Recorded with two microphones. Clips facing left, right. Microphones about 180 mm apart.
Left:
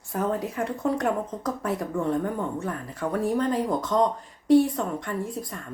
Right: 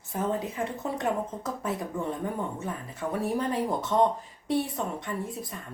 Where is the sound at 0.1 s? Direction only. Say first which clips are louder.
Left 3 dB; centre (ahead or behind).